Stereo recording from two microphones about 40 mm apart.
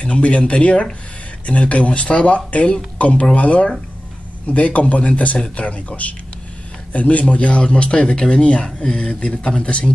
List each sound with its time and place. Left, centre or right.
0.0 s a man's voice: left
8.6 s speech: centre
9.0 s speech: left